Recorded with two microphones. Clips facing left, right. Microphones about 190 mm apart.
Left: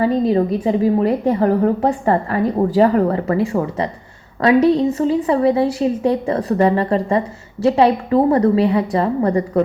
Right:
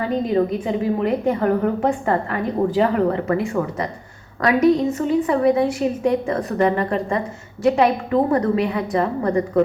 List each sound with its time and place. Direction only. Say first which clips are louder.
0.0 s a woman's voice: left 4 dB; 35° left (ahead or behind)